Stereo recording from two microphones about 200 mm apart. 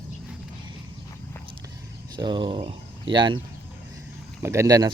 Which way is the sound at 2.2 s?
25° right (ahead or behind).